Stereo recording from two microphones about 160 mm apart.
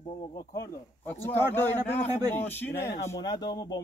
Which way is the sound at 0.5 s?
15° left (ahead or behind).